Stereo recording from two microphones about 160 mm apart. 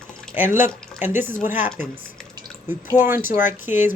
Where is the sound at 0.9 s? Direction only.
15° right (ahead or behind).